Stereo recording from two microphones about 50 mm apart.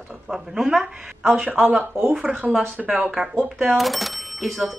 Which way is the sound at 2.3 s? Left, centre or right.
Right.